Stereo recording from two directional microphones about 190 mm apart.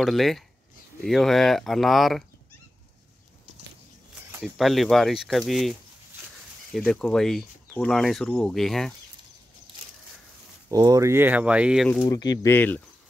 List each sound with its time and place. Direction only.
0.0 s speech: centre (ahead or behind)
4.3 s speech: 5° right (ahead or behind)
10.7 s speech: 20° right (ahead or behind); by 12.1 s 5° left (ahead or behind)
12.1 s speech: 20° left (ahead or behind)
12.5 s speech: 10° left (ahead or behind)